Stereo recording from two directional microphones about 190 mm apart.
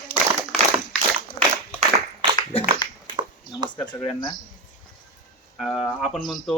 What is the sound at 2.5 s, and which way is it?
Speech, 30° left (ahead or behind).